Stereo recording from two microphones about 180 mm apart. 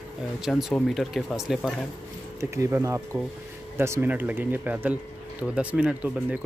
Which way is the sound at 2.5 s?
15° right (ahead or behind).